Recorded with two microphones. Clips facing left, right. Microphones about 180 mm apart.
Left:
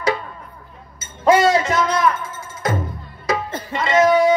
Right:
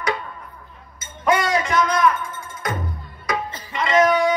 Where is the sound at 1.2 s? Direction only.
25° left (ahead or behind).